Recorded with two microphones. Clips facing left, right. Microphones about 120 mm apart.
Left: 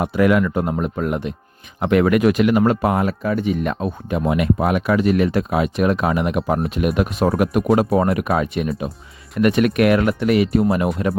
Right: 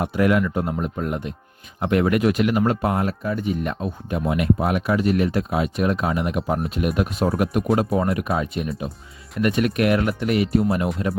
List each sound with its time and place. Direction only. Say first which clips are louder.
0.0 s speech: left 3 dB; 90° left